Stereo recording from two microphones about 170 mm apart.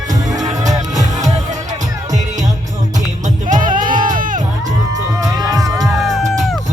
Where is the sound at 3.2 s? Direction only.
50° right (ahead or behind).